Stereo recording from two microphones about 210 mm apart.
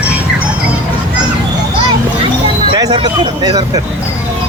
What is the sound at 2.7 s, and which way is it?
Speech, 20° right (ahead or behind).